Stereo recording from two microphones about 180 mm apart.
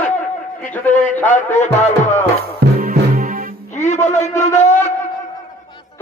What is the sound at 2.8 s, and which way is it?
Music, 55° right (ahead or behind).